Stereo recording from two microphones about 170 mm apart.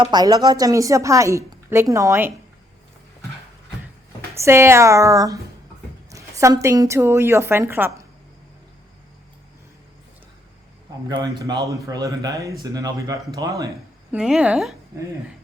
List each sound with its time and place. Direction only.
0.0 s a woman's voice: 25° right (ahead or behind)
4.4 s a woman's voice: 15° right (ahead or behind)
11.1 s a woman's voice: 25° right (ahead or behind)
14.1 s a woman's voice: 5° right (ahead or behind)